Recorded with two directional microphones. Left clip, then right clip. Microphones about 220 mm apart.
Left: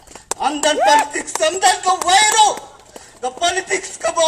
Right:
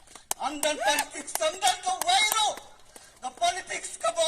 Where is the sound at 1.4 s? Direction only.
30° right (ahead or behind).